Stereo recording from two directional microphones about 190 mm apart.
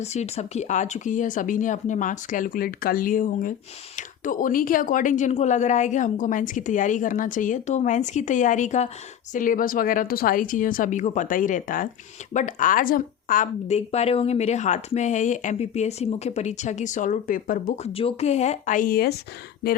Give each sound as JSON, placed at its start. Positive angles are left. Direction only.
{"t": 0.0, "sound": "a woman's voice", "side_deg": 35}
{"t": 17.9, "sound": "a woman's voice", "side_deg": 30}